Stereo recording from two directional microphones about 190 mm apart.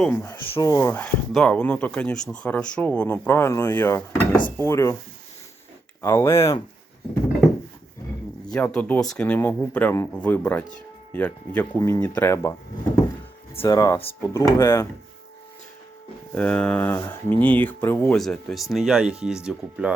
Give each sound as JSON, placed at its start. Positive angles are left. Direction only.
{"t": 0.0, "sound": "speech", "side_deg": 10}
{"t": 6.0, "sound": "speech", "side_deg": 15}
{"t": 8.5, "sound": "speech", "side_deg": 5}
{"t": 13.6, "sound": "speech", "side_deg": 20}
{"t": 16.3, "sound": "speech", "side_deg": 5}